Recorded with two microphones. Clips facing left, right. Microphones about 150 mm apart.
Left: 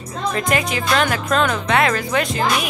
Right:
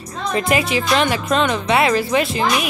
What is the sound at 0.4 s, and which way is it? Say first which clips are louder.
Speech: right 4 dB; 5° right (ahead or behind).